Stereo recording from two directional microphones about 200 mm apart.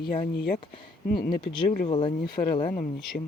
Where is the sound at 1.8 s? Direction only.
25° left (ahead or behind).